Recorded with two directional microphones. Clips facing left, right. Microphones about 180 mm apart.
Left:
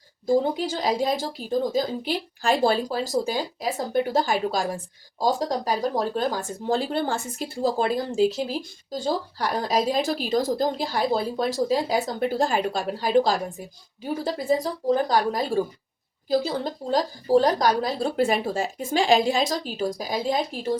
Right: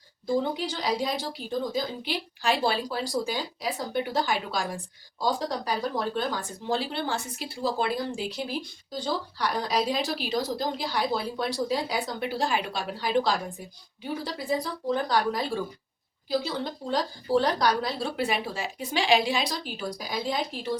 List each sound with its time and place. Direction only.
0.3 s speech: 45° left (ahead or behind)